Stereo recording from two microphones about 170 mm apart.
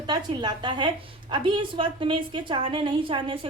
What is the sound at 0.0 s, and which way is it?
A woman's voice, 25° right (ahead or behind).